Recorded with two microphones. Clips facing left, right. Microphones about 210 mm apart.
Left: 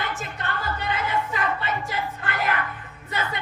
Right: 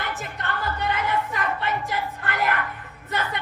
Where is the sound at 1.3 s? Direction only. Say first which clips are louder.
Even; 55° right (ahead or behind).